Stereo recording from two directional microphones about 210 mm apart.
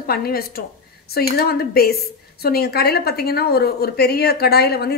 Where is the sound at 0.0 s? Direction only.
45° left (ahead or behind).